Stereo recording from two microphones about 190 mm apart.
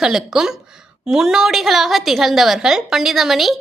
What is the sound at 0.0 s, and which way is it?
A woman's voice, centre (ahead or behind).